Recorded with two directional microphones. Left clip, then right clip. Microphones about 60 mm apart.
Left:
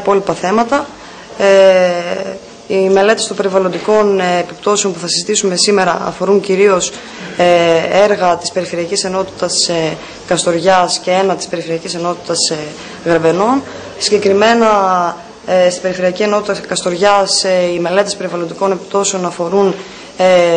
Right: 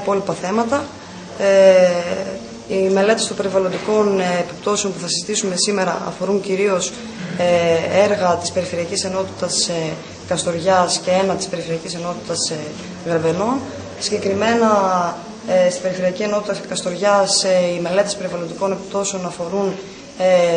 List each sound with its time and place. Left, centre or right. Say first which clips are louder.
0.0 s speech: left 7 dB; right